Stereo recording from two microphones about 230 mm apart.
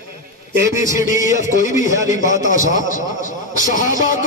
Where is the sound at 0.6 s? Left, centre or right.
Centre.